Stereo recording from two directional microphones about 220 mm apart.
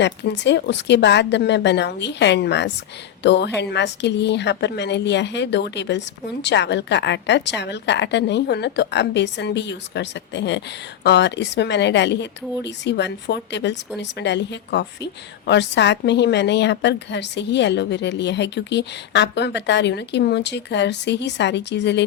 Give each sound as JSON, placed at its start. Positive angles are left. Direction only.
{"t": 0.0, "sound": "a woman's voice", "side_deg": 55}